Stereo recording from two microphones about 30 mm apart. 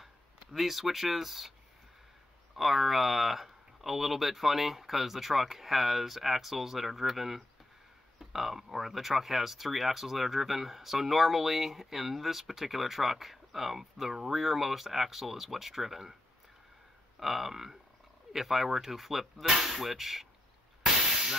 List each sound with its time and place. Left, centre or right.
0.0 s speech: centre
2.5 s speech: centre
8.2 s a sound: centre
8.7 s speech: centre
17.2 s speech: centre